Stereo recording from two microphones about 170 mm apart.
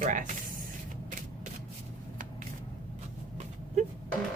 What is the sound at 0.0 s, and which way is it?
Speech, 50° right (ahead or behind).